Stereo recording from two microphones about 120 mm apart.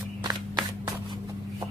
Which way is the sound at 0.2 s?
35° right (ahead or behind).